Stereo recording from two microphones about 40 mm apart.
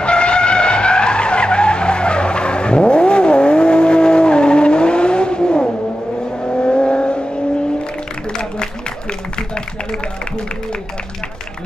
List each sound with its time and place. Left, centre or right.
0.0 s vehicle: left